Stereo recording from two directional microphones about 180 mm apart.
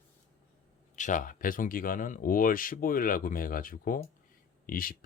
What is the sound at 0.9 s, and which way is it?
Speech, 45° left (ahead or behind).